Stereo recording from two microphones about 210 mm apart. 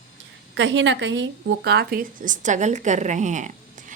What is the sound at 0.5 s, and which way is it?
A woman's voice, 60° right (ahead or behind).